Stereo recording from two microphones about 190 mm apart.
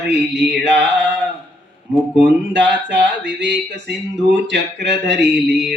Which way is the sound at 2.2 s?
70° right (ahead or behind).